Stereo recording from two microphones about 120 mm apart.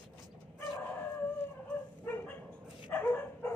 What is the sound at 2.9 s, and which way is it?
Bow-wow, 15° left (ahead or behind).